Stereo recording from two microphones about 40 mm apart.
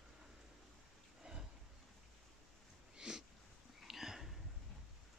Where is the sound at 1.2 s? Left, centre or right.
Centre.